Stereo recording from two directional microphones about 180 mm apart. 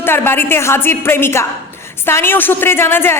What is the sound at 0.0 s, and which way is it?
A woman's voice, 10° left (ahead or behind).